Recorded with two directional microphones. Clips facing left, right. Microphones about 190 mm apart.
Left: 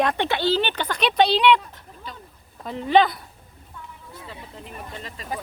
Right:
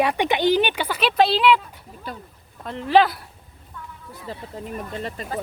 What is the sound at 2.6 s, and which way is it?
Speech, centre (ahead or behind).